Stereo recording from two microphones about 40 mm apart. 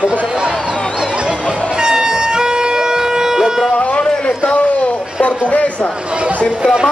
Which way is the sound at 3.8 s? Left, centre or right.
Left.